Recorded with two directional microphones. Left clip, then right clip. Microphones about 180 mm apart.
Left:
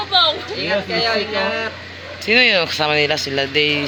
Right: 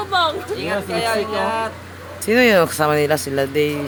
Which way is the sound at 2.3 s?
40° right (ahead or behind).